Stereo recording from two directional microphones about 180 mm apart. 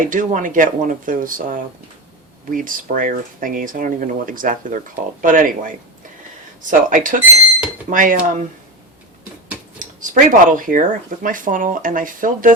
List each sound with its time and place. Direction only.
0.0 s speech: 45° right (ahead or behind)
9.7 s speech: 45° right (ahead or behind)